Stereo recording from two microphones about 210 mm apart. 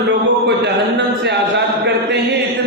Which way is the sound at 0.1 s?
55° right (ahead or behind).